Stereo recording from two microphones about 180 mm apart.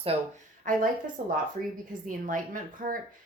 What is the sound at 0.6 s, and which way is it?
Speech, 45° right (ahead or behind).